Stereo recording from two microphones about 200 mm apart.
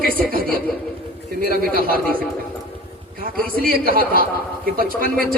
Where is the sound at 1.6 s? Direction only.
45° right (ahead or behind).